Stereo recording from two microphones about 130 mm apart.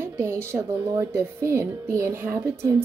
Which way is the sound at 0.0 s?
20° right (ahead or behind).